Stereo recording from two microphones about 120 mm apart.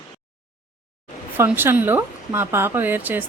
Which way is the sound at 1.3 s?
15° right (ahead or behind).